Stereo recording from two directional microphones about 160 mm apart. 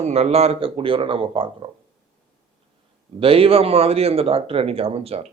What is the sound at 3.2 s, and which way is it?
A man's voice, 35° right (ahead or behind).